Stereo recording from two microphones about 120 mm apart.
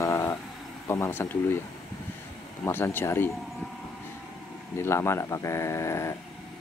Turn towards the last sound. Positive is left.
turn(degrees=25)  # may be behind; listen again after turning